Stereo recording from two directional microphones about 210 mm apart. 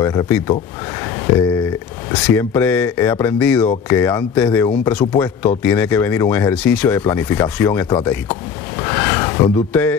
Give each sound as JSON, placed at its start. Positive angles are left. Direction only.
{"t": 0.0, "sound": "speech", "side_deg": 15}
{"t": 1.2, "sound": "speech", "side_deg": 5}
{"t": 7.6, "sound": "speech", "side_deg": 20}
{"t": 8.8, "sound": "a sound", "side_deg": 10}